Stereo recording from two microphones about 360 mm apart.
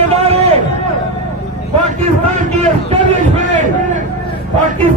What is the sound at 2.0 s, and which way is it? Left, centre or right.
Speech, centre.